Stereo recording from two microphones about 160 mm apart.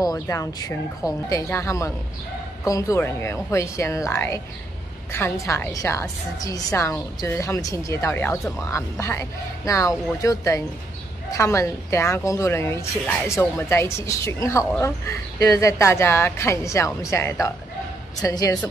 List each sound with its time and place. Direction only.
0.0 s a woman's voice: 20° left (ahead or behind)